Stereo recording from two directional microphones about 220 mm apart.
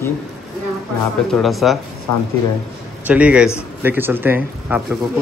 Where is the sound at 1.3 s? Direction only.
Centre (ahead or behind).